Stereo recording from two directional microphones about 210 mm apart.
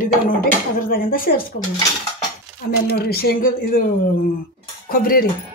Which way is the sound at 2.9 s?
50° left (ahead or behind).